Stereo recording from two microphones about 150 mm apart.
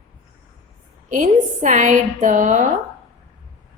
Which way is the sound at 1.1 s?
60° right (ahead or behind).